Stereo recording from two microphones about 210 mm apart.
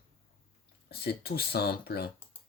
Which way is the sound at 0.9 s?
50° left (ahead or behind).